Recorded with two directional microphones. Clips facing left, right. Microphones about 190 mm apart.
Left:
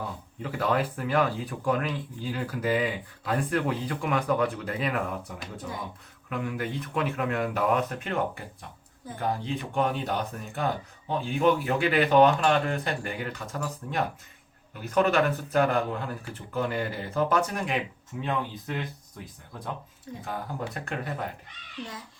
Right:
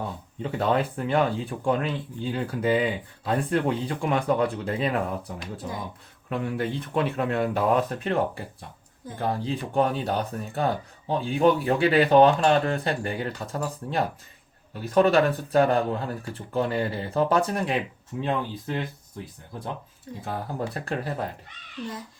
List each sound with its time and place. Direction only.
0.4 s speech: 25° right (ahead or behind)
20.2 s speech: 35° right (ahead or behind)